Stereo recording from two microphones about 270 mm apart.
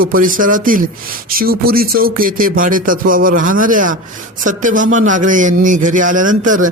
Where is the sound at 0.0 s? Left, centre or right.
Right.